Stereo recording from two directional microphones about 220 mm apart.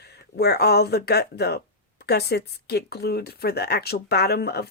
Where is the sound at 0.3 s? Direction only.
45° left (ahead or behind).